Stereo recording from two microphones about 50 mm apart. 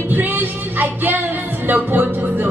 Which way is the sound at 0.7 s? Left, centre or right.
Right.